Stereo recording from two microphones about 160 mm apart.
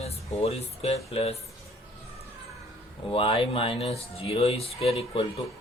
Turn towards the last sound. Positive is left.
turn(degrees=35)  # may be behind; listen again after turning